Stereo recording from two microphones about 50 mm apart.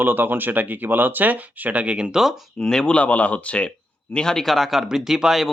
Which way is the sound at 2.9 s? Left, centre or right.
Left.